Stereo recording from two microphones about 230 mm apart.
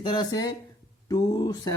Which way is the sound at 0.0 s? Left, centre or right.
Centre.